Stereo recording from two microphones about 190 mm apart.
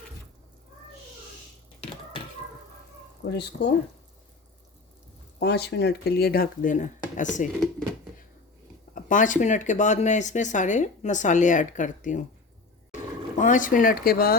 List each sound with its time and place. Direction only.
3.2 s speech: 60° left (ahead or behind)
5.4 s speech: 60° left (ahead or behind); by 7.4 s 40° left (ahead or behind)
9.0 s speech: 40° left (ahead or behind)
13.4 s speech: 45° left (ahead or behind)